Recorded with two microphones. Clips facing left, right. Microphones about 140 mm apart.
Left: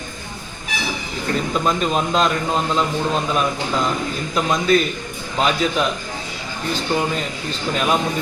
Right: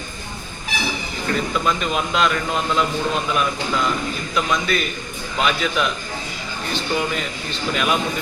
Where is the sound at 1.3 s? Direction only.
30° left (ahead or behind).